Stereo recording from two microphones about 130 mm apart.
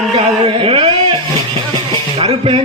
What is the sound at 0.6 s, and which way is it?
Speech, 45° right (ahead or behind).